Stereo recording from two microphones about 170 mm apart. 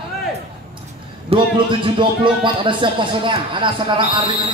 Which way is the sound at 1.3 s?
35° right (ahead or behind).